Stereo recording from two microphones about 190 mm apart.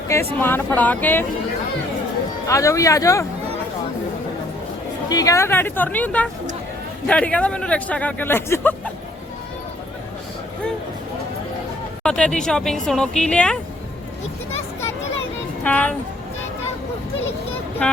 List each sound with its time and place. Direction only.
0.3 s speech: 10° left (ahead or behind)
2.5 s speech: 15° left (ahead or behind)
5.0 s speech: 20° left (ahead or behind)
12.0 s speech: 5° left (ahead or behind)
15.6 s speech: 5° left (ahead or behind)